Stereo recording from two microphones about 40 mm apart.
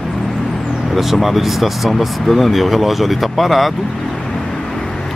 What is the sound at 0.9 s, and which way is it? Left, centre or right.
Speech, centre.